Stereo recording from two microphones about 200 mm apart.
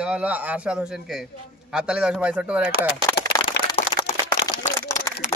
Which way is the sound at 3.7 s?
25° left (ahead or behind).